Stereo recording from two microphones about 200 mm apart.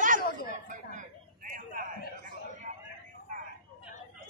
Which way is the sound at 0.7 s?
40° right (ahead or behind).